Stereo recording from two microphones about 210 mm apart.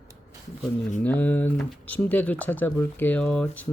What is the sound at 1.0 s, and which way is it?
Speech, 10° left (ahead or behind).